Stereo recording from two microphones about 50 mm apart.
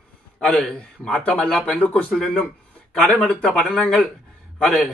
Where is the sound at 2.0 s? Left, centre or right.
Centre.